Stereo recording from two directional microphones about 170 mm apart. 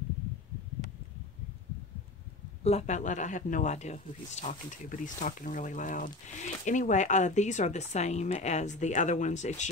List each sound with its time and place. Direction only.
2.6 s speech: 40° left (ahead or behind)